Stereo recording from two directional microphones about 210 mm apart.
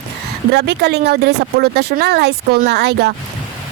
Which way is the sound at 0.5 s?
50° right (ahead or behind).